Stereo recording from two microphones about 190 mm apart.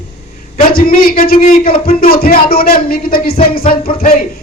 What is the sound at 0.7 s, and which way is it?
A woman's voice, 50° left (ahead or behind).